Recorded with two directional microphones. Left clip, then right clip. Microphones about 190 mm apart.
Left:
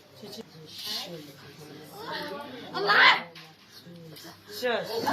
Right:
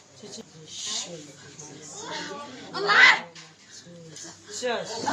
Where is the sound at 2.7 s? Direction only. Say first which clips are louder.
Right 3 dB; 5° right (ahead or behind).